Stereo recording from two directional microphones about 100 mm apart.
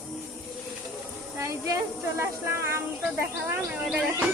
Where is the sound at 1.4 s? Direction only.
30° right (ahead or behind).